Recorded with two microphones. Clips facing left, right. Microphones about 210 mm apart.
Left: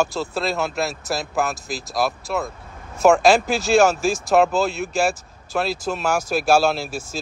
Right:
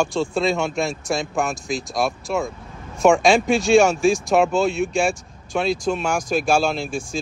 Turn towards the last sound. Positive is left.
turn(degrees=5)  # may be behind; listen again after turning